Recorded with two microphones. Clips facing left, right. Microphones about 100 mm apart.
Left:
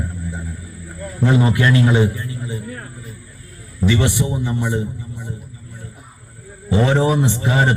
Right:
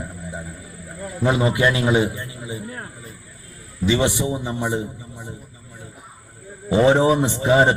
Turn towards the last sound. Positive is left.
turn(degrees=-25)  # may be behind; listen again after turning